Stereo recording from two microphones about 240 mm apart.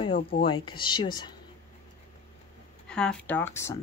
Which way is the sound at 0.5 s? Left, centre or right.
Centre.